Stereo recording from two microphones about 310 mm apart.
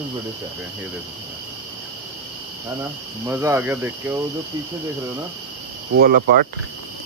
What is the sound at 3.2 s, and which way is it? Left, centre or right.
Speech, centre.